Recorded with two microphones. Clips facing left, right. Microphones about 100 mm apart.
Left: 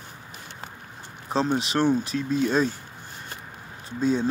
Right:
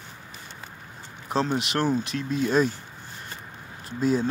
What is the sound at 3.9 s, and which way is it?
Speech, 5° right (ahead or behind).